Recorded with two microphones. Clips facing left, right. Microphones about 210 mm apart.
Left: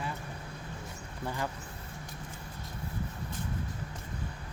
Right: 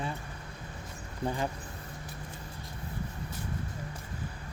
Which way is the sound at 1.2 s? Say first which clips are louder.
Right 4 dB; 20° right (ahead or behind).